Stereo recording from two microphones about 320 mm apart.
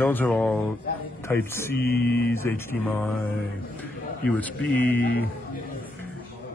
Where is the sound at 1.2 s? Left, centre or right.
Centre.